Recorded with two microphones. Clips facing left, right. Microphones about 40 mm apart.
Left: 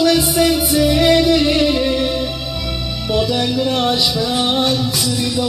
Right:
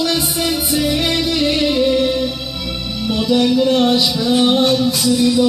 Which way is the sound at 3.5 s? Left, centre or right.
Left.